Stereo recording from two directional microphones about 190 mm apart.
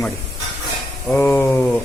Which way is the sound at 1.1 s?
10° left (ahead or behind).